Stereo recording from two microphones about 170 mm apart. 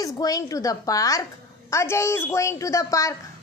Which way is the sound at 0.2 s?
20° left (ahead or behind).